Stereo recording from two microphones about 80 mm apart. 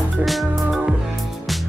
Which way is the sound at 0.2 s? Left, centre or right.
Centre.